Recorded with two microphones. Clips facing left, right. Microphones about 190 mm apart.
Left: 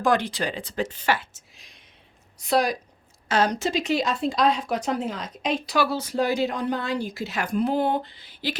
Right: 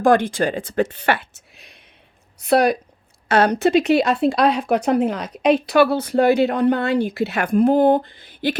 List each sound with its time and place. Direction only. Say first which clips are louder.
0.0 s speech: right 7 dB; 50° right (ahead or behind)